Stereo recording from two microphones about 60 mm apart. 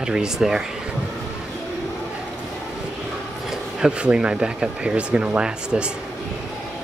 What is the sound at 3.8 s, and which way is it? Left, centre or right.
Speech, centre.